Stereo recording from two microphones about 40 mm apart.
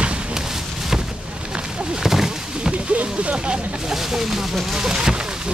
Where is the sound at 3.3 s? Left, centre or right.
Right.